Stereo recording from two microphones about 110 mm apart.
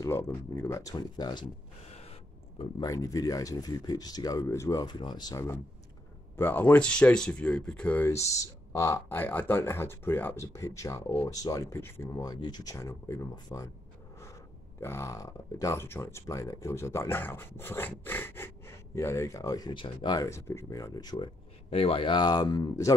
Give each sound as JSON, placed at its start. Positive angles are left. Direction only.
{"t": 0.0, "sound": "speech", "side_deg": 25}
{"t": 1.9, "sound": "a sound", "side_deg": 75}
{"t": 2.8, "sound": "speech", "side_deg": 35}
{"t": 4.8, "sound": "speech", "side_deg": 40}
{"t": 6.3, "sound": "speech", "side_deg": 20}
{"t": 8.1, "sound": "speech", "side_deg": 30}
{"t": 14.8, "sound": "speech", "side_deg": 25}
{"t": 19.7, "sound": "speech", "side_deg": 45}
{"t": 20.2, "sound": "speech", "side_deg": 25}
{"t": 21.6, "sound": "speech", "side_deg": 60}